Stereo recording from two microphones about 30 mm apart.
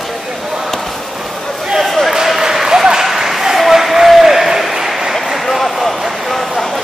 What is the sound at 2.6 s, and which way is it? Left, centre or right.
Applause, centre.